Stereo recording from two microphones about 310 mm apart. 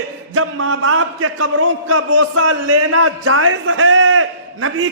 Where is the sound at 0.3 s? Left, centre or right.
Right.